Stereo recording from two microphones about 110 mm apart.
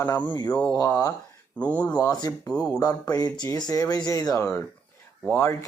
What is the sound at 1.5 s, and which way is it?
Speech, 10° left (ahead or behind).